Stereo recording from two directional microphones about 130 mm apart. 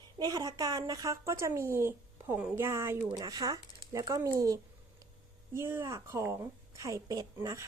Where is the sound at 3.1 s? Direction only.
30° right (ahead or behind).